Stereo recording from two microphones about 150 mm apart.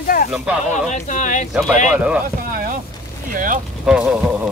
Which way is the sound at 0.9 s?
55° left (ahead or behind).